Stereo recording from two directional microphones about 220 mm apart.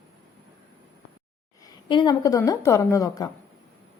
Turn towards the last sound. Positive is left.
turn(degrees=15)  # may be behind; listen again after turning